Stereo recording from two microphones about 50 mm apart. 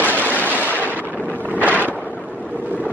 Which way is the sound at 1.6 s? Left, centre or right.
Right.